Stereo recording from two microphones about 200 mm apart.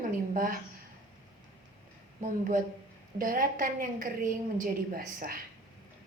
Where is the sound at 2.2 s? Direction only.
40° right (ahead or behind).